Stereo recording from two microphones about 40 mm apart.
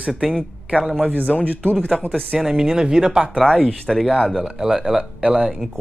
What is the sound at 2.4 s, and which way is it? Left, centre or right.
Speech, centre.